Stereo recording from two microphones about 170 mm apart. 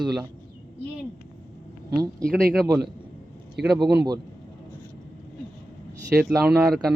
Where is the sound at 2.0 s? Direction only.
Centre (ahead or behind).